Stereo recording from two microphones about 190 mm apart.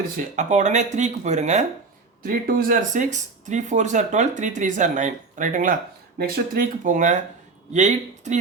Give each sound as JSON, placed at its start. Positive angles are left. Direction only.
{"t": 0.2, "sound": "speech", "side_deg": -40}